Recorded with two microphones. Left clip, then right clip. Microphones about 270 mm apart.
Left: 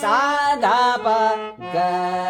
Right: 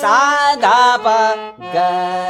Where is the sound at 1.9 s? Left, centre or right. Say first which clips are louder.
Right 4 dB; right.